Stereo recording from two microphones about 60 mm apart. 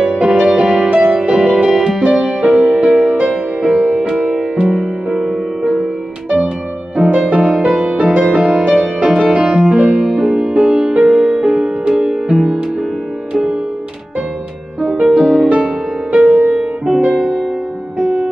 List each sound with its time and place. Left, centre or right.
0.1 s music: centre
1.3 s music: centre
7.2 s music: centre
14.8 s music: centre